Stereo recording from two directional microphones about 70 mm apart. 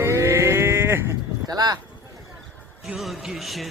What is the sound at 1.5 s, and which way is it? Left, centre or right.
Speech, right.